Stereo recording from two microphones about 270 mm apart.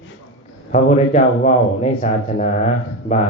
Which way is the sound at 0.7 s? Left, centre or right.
Left.